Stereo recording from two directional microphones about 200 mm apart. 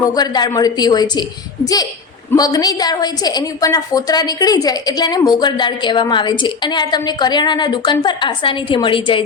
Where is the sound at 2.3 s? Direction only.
20° left (ahead or behind).